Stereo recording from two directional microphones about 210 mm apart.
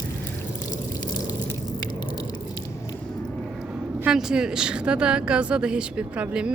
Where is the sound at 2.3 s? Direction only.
15° left (ahead or behind).